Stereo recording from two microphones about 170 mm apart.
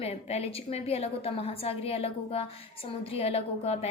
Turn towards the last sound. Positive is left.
turn(degrees=35)  # may be behind; listen again after turning